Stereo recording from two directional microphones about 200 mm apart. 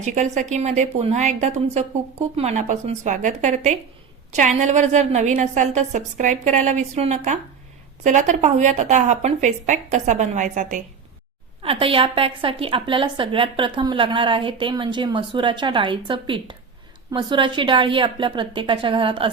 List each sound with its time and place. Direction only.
0.0 s a woman's voice: 35° right (ahead or behind)
11.6 s a woman's voice: 30° right (ahead or behind)